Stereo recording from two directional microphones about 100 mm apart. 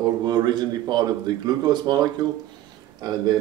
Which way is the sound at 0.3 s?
45° right (ahead or behind).